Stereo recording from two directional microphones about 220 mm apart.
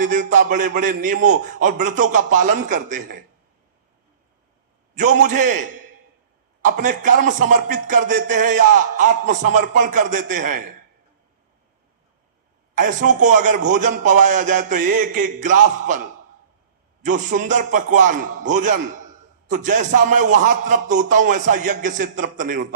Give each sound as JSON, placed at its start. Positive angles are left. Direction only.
{"t": 0.0, "sound": "a man's voice", "side_deg": -35}
{"t": 4.9, "sound": "a man's voice", "side_deg": -35}
{"t": 12.7, "sound": "a man's voice", "side_deg": -35}